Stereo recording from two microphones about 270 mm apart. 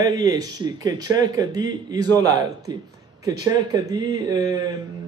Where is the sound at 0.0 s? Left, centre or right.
Centre.